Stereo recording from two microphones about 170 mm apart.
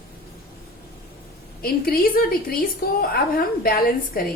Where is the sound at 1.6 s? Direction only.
60° left (ahead or behind).